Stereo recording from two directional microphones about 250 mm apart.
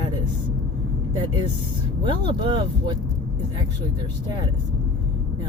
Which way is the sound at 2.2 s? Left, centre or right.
Centre.